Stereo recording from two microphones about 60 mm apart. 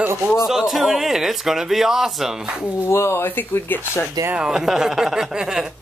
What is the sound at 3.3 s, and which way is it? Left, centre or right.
Speech, left.